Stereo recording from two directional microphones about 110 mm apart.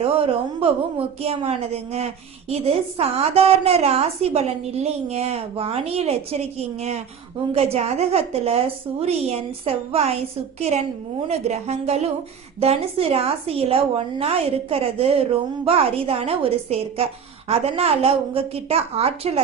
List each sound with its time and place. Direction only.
0.0 s a woman's voice: 60° right (ahead or behind); by 11.9 s 75° right (ahead or behind)
12.5 s a woman's voice: 65° right (ahead or behind)